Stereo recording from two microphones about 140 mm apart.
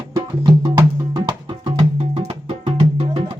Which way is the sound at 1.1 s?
35° right (ahead or behind).